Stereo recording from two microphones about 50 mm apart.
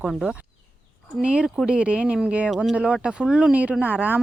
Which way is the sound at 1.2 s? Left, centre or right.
Right.